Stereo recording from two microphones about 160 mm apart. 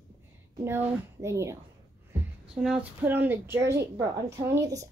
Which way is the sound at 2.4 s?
5° right (ahead or behind).